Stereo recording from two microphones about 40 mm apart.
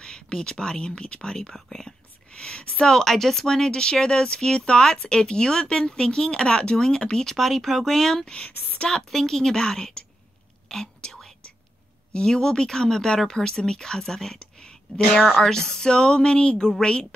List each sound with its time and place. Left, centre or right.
0.0 s a woman's voice: centre
2.3 s speech: left
2.8 s speech: centre
7.2 s a woman's voice: centre
8.5 s a woman's voice: left
8.8 s a woman's voice: centre
10.7 s whispering: centre
12.1 s a woman's voice: left